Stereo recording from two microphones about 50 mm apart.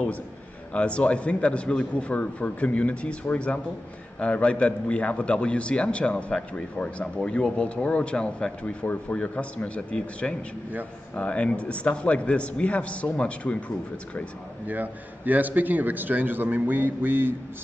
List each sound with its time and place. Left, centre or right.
0.7 s a man's voice: left
7.4 s a man's voice: left
14.7 s a man's voice: right